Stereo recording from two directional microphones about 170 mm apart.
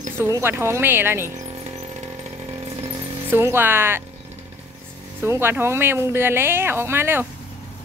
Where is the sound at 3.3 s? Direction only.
15° right (ahead or behind).